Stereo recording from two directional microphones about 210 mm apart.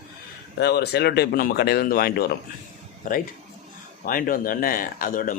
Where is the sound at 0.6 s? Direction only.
50° left (ahead or behind).